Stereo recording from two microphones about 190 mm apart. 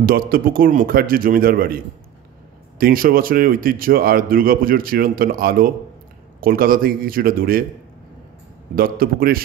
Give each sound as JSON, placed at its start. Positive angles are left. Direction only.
{"t": 0.0, "sound": "a man's voice", "side_deg": -50}
{"t": 2.8, "sound": "a man's voice", "side_deg": -50}
{"t": 8.7, "sound": "a man's voice", "side_deg": -50}